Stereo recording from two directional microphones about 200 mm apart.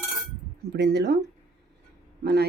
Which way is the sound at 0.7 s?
55° right (ahead or behind).